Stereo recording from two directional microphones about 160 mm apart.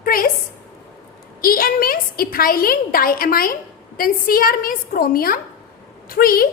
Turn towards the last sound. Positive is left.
turn(degrees=65)  # may be behind; listen again after turning